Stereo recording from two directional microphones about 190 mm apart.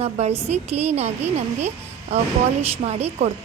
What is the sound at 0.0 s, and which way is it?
A woman's voice, 35° right (ahead or behind).